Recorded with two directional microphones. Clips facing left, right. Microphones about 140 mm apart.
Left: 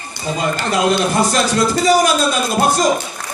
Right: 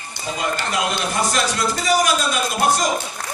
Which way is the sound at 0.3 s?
35° left (ahead or behind).